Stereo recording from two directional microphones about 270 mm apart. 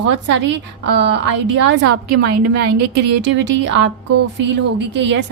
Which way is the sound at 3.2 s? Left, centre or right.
Right.